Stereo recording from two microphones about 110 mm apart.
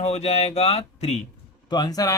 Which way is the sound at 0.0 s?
80° left.